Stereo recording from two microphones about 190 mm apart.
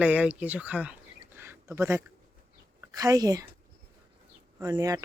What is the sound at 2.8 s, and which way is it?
Speech, 20° right (ahead or behind).